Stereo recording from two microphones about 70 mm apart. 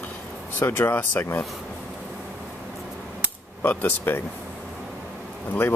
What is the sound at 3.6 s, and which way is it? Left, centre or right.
Speech, left.